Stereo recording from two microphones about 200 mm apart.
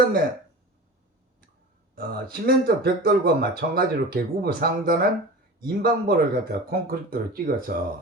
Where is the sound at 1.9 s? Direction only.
50° right (ahead or behind).